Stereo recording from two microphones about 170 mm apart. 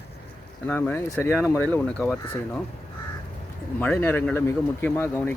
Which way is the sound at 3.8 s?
10° left (ahead or behind).